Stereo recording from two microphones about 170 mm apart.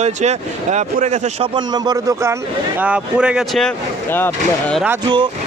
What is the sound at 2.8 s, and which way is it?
Speech, 5° right (ahead or behind).